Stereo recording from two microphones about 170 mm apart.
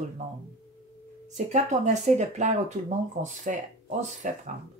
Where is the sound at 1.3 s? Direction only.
45° right (ahead or behind).